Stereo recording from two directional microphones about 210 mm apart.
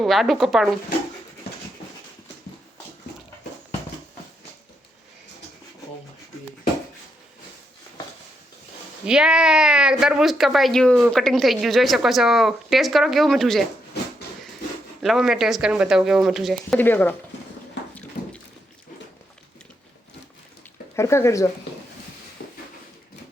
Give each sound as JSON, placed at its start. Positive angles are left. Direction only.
{"t": 0.0, "sound": "speech", "side_deg": 0}
{"t": 9.0, "sound": "speech", "side_deg": -5}
{"t": 15.0, "sound": "speech", "side_deg": 0}
{"t": 20.9, "sound": "speech", "side_deg": 15}
{"t": 22.4, "sound": "a sound", "side_deg": 45}